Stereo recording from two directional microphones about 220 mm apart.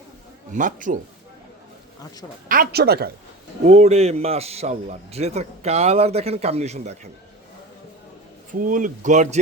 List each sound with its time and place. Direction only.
0.5 s speech: 35° right (ahead or behind)
2.5 s speech: 45° right (ahead or behind)
3.7 s a man's voice: 30° right (ahead or behind)
8.5 s speech: 35° right (ahead or behind)